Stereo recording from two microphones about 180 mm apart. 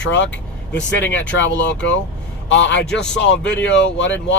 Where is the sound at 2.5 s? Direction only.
85° left.